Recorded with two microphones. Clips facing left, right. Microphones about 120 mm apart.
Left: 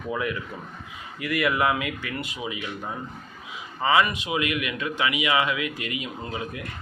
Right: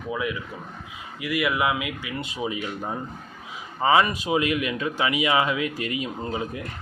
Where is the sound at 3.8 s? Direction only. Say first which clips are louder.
Right 2 dB; 30° right (ahead or behind).